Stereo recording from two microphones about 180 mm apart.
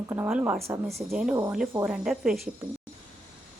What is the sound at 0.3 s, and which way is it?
Speech, 5° right (ahead or behind).